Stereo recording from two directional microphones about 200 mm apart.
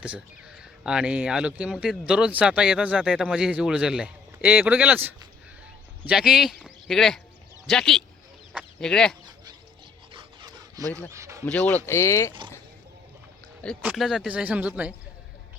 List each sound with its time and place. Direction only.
0.0 s speech: 5° right (ahead or behind)
8.5 s chicken: 5° left (ahead or behind)
9.2 s a sound: 20° right (ahead or behind)
10.1 s dog: 20° right (ahead or behind)
11.1 s a sound: 15° right (ahead or behind)
11.4 s speech: 5° left (ahead or behind)
13.8 s speech: centre (ahead or behind)